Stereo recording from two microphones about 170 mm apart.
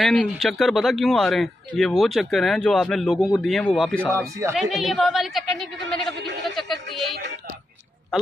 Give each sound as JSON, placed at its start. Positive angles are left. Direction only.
{"t": 0.0, "sound": "speech", "side_deg": 5}
{"t": 4.1, "sound": "speech", "side_deg": -15}
{"t": 4.6, "sound": "speech", "side_deg": 0}
{"t": 6.5, "sound": "music", "side_deg": 0}